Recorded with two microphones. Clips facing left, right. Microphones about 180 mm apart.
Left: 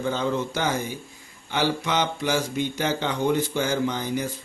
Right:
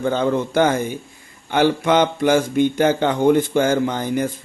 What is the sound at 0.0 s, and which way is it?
A man's voice, 55° right (ahead or behind).